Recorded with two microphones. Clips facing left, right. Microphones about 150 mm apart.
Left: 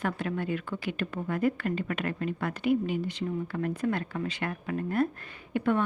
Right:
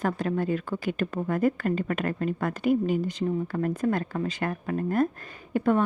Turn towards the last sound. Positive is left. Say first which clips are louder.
# right 3 dB
turn(degrees=-40)  # may be behind; listen again after turning